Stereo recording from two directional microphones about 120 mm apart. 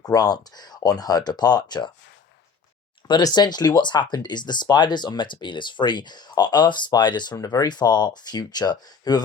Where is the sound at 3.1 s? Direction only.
35° left (ahead or behind).